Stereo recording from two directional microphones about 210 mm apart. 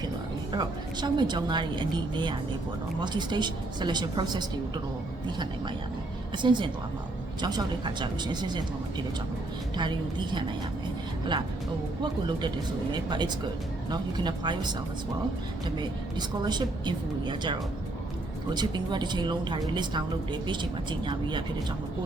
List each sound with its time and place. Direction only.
0.5 s a woman's voice: 20° right (ahead or behind)
6.3 s a woman's voice: 20° right (ahead or behind)
12.9 s a woman's voice: 20° right (ahead or behind)
16.1 s a woman's voice: 20° right (ahead or behind)